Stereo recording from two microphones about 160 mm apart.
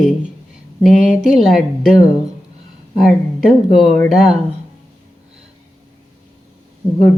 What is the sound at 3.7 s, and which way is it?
Speech, centre (ahead or behind).